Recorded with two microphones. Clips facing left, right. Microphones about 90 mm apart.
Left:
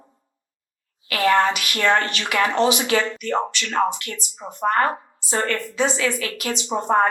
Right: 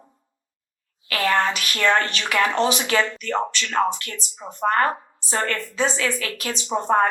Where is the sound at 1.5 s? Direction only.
35° right (ahead or behind).